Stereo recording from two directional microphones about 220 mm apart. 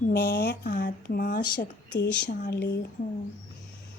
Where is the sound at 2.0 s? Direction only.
50° left (ahead or behind).